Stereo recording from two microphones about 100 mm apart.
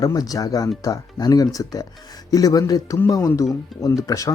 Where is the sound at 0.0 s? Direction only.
40° left (ahead or behind).